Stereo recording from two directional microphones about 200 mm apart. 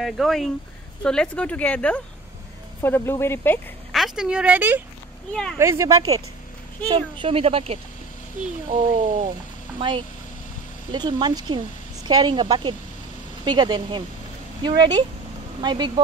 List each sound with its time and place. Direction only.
0.0 s speech: centre (ahead or behind)
3.9 s a woman's voice: centre (ahead or behind)
5.3 s speech: 5° left (ahead or behind)
5.6 s a woman's voice: 15° right (ahead or behind)